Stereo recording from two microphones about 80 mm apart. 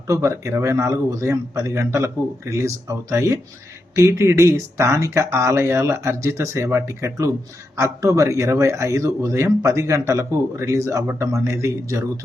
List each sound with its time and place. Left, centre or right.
0.1 s speech: right